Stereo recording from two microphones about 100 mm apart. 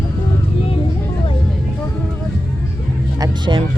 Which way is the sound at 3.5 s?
45° right (ahead or behind).